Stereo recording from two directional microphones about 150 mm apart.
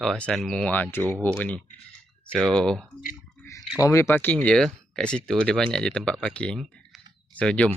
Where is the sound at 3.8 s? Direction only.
20° left (ahead or behind).